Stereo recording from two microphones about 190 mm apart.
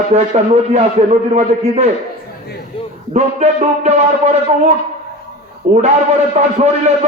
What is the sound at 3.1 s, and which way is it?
A man's voice, 35° right (ahead or behind).